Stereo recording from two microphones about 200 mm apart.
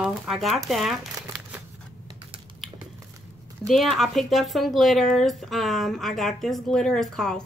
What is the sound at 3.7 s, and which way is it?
Speech, centre (ahead or behind).